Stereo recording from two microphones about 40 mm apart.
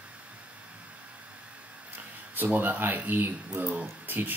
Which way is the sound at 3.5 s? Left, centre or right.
Right.